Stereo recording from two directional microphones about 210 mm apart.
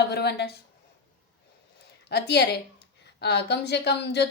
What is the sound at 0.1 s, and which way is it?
Speech, 50° left (ahead or behind).